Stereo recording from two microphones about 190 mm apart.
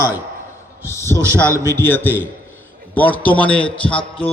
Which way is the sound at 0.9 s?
15° left (ahead or behind).